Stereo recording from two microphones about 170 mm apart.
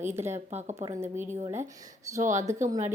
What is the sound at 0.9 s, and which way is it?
Speech, 15° right (ahead or behind).